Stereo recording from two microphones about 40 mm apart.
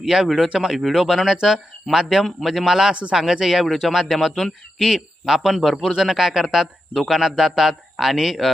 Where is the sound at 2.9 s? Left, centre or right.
Right.